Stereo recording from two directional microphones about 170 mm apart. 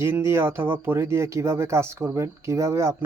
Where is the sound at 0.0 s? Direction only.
15° right (ahead or behind).